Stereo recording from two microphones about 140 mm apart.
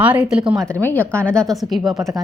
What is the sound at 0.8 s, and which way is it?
A woman's voice, 10° left (ahead or behind).